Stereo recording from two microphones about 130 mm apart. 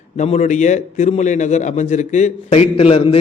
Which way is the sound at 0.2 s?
60° left (ahead or behind).